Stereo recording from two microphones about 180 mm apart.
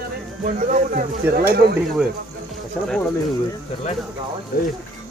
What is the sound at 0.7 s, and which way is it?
Speech, 50° right (ahead or behind).